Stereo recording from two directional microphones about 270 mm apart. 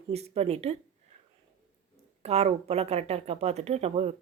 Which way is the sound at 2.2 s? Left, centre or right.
Right.